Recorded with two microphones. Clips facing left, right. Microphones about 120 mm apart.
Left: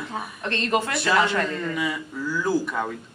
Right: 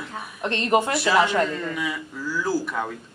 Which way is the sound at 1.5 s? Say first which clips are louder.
Left 1 dB; centre (ahead or behind).